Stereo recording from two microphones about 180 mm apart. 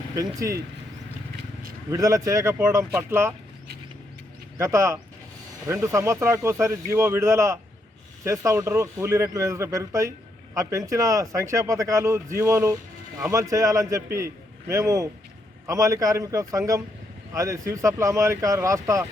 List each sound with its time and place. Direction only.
0.3 s speech: 20° right (ahead or behind)
1.9 s speech: 15° right (ahead or behind)
4.5 s a man's voice: 15° right (ahead or behind)